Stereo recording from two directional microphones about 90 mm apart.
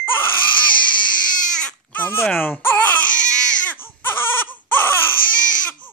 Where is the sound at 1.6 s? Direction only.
20° left (ahead or behind).